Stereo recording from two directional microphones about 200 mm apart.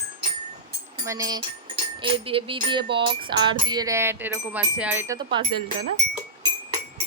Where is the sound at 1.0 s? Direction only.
15° right (ahead or behind).